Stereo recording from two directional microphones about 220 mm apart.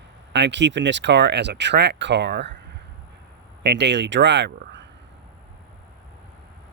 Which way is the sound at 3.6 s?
50° right (ahead or behind).